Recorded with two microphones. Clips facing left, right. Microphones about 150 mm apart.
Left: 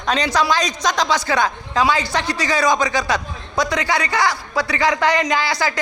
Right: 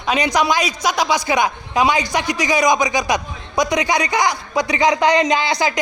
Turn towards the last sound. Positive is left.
turn(degrees=-20)  # may be behind; listen again after turning